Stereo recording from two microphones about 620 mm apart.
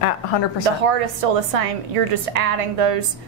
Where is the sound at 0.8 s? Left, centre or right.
Right.